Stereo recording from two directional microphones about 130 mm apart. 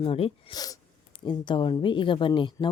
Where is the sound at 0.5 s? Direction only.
30° left (ahead or behind).